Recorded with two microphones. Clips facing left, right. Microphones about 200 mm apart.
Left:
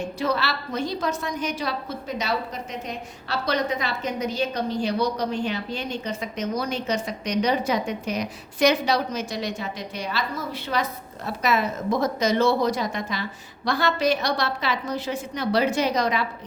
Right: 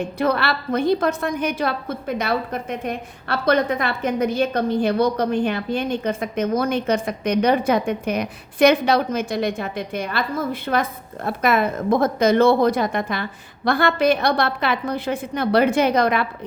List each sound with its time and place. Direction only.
0.0 s a woman's voice: 55° right (ahead or behind)